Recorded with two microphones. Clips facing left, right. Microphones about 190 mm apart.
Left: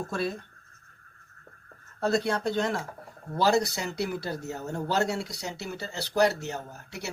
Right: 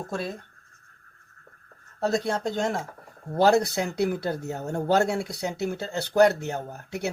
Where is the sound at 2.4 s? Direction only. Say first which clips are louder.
Right 1 dB; 45° right (ahead or behind).